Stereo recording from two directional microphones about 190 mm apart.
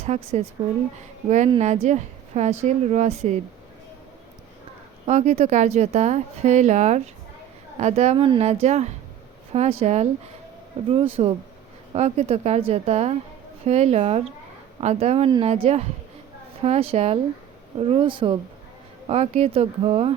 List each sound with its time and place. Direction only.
0.0 s a woman's voice: 35° right (ahead or behind)
1.5 s a woman's voice: 35° right (ahead or behind)
5.0 s a woman's voice: 35° right (ahead or behind)